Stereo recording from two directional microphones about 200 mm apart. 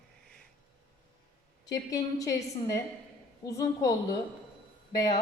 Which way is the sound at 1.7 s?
15° left (ahead or behind).